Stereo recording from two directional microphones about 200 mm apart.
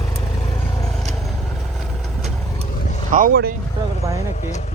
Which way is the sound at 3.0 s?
45° right (ahead or behind).